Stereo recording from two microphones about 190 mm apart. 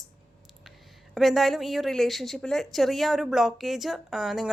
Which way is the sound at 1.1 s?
Centre (ahead or behind).